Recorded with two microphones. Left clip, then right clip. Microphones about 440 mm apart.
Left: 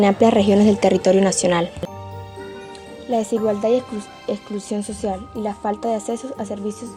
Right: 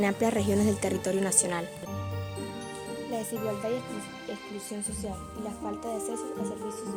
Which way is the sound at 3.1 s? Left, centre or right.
Right.